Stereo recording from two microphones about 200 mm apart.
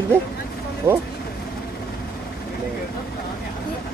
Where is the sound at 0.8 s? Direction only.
10° right (ahead or behind).